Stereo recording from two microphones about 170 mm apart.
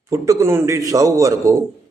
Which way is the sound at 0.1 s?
20° right (ahead or behind).